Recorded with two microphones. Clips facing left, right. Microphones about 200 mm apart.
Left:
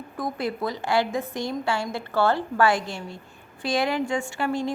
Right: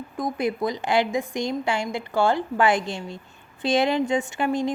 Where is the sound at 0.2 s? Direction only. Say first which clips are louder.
Right 3 dB; 15° right (ahead or behind).